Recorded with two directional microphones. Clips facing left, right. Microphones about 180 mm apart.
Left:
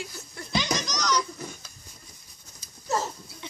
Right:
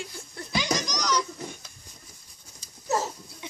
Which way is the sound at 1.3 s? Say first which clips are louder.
Right 1 dB; 25° right (ahead or behind).